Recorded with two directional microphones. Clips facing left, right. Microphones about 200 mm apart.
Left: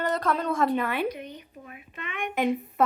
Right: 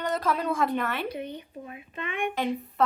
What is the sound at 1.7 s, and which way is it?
Speech, 25° right (ahead or behind).